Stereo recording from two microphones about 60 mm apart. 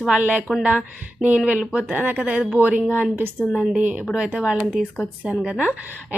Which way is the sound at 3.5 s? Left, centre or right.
Centre.